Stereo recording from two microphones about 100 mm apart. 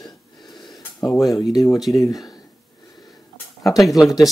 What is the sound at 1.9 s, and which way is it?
Speech, 30° left (ahead or behind).